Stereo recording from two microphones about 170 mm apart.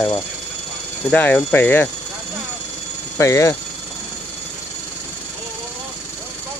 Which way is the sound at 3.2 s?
20° left (ahead or behind).